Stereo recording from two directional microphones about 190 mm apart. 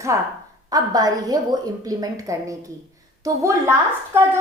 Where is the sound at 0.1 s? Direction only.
15° right (ahead or behind).